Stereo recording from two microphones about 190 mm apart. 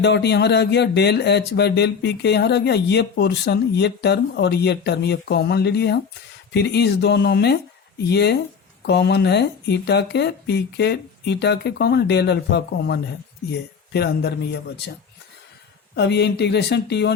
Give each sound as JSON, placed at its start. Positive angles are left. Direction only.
{"t": 0.0, "sound": "speech", "side_deg": 65}
{"t": 16.0, "sound": "speech", "side_deg": 65}